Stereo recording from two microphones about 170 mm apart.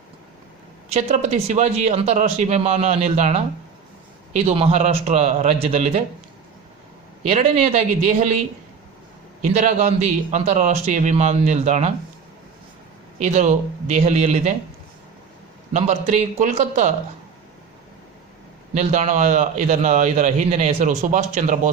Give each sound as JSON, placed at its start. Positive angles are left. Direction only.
{"t": 0.9, "sound": "a man's voice", "side_deg": -45}
{"t": 7.3, "sound": "a man's voice", "side_deg": -35}
{"t": 9.5, "sound": "a man's voice", "side_deg": -40}
{"t": 13.1, "sound": "a man's voice", "side_deg": -45}
{"t": 15.7, "sound": "a man's voice", "side_deg": -40}
{"t": 18.7, "sound": "a man's voice", "side_deg": -40}